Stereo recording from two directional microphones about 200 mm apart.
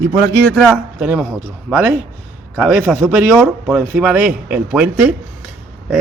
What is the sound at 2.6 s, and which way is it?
Speech, 5° right (ahead or behind).